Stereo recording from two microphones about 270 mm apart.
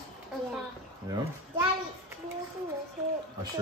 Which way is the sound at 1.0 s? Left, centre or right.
Centre.